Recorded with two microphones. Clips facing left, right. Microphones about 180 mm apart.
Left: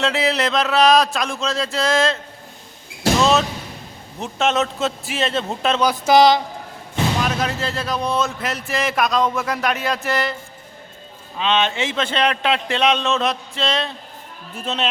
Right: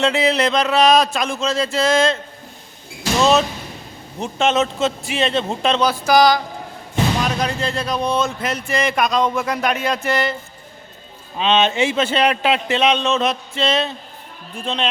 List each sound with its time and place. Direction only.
0.0 s speech: centre (ahead or behind)
4.2 s speech: centre (ahead or behind)
5.9 s speech: 25° left (ahead or behind)
7.2 s speech: 5° left (ahead or behind)
11.3 s speech: 20° right (ahead or behind); by 14.8 s 5° left (ahead or behind)